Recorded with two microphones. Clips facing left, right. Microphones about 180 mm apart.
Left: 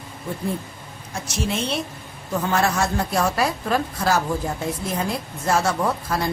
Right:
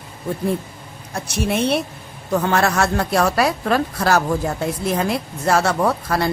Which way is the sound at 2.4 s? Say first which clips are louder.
Right 2 dB; 75° right (ahead or behind).